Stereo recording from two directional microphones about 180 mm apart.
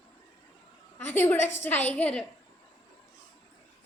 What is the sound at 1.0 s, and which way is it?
Speech, 10° left (ahead or behind).